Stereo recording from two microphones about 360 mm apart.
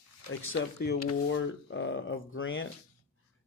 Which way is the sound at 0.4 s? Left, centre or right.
Left.